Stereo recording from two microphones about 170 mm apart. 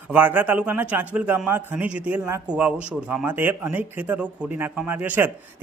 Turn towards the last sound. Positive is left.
turn(degrees=-10)  # may be behind; listen again after turning